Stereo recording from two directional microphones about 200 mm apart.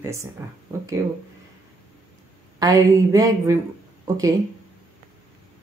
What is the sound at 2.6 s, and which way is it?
Speech, 15° right (ahead or behind).